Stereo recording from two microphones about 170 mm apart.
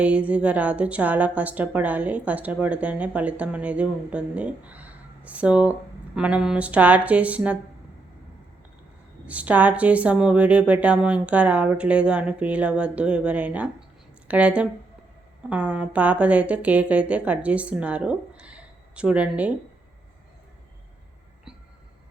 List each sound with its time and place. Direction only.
0.0 s a woman's voice: 5° right (ahead or behind)
9.2 s a woman's voice: 10° right (ahead or behind)